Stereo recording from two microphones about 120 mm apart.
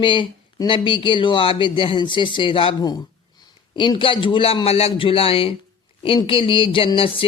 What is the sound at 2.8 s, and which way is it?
A man's voice, 35° left (ahead or behind).